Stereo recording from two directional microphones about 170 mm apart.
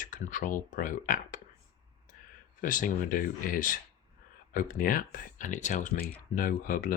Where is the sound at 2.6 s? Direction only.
50° left (ahead or behind).